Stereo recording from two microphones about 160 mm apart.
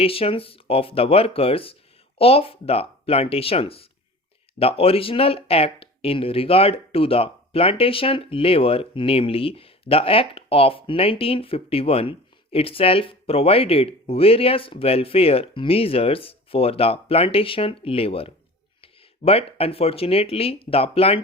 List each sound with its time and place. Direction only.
0.0 s speech: 35° left (ahead or behind)